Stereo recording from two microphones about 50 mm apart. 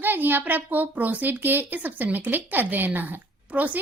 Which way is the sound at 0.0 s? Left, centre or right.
Right.